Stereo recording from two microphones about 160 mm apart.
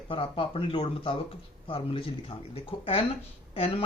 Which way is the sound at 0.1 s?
35° left (ahead or behind).